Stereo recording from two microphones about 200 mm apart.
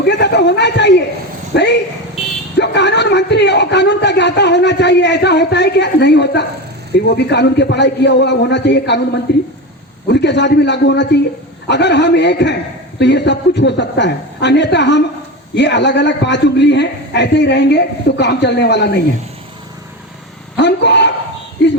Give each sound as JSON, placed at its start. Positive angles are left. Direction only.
{"t": 0.0, "sound": "a man's voice", "side_deg": 60}
{"t": 20.6, "sound": "a man's voice", "side_deg": 60}